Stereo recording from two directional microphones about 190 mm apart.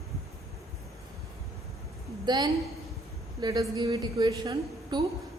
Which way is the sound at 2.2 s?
20° right (ahead or behind).